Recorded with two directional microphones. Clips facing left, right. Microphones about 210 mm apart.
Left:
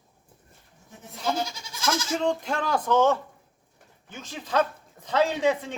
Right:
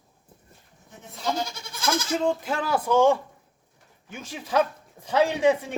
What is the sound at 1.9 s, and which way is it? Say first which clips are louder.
Goat: right 2 dB; 55° right (ahead or behind).